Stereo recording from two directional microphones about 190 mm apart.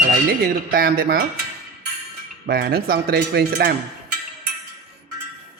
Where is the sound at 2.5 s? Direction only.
55° right (ahead or behind).